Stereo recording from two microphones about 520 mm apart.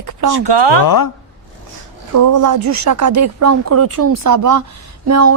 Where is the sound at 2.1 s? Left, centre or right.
Right.